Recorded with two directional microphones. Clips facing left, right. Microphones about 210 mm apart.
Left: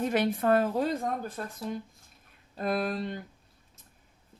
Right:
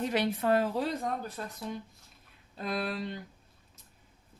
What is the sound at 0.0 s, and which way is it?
Speech, 50° left (ahead or behind).